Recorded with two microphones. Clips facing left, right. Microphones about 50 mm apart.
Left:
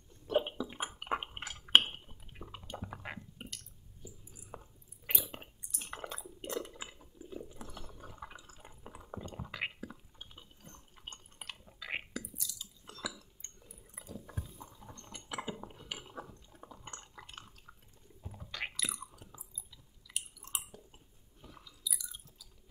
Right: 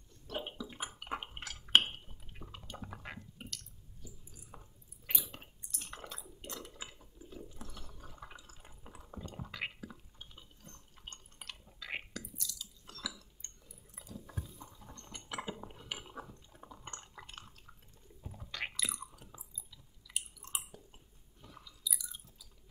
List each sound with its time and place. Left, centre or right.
0.1 s a sound: centre
1.9 s liquid: centre
2.8 s chewing: centre
6.4 s water: centre
9.3 s whispering: centre
10.1 s a sound: centre
14.0 s a sound: left
14.6 s liquid: centre
18.4 s chewing: centre